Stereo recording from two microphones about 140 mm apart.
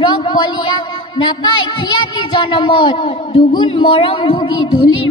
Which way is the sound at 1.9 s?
30° left (ahead or behind).